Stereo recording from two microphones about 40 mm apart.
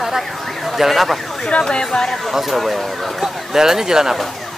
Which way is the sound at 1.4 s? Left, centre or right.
Left.